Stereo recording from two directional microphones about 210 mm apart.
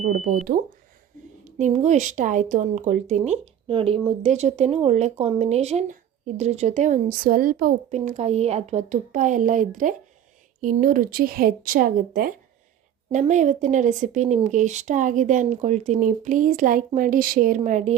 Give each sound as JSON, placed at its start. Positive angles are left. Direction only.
{"t": 1.5, "sound": "speech", "side_deg": -35}